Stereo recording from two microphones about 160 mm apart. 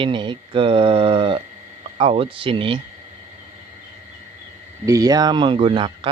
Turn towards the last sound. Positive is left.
turn(degrees=-30)  # may be behind; listen again after turning